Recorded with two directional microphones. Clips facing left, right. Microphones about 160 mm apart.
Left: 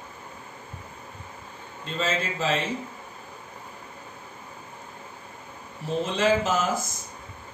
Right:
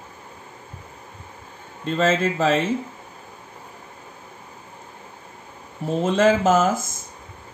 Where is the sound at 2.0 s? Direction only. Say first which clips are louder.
Right 8 dB; 50° right (ahead or behind).